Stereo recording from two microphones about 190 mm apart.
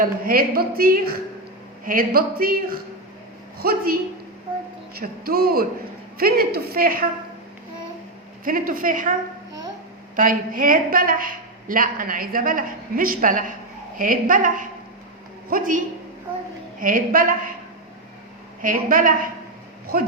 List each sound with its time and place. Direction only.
0.0 s a woman's voice: 50° right (ahead or behind)
4.9 s a woman's voice: 50° right (ahead or behind)
8.4 s a woman's voice: 45° right (ahead or behind)
10.2 s a woman's voice: 45° right (ahead or behind)
16.8 s a woman's voice: 45° right (ahead or behind)
18.6 s a woman's voice: 45° right (ahead or behind)